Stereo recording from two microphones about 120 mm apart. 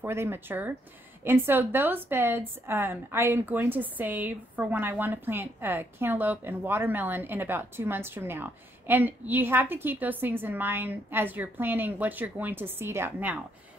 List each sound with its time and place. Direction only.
0.0 s speech: 20° right (ahead or behind)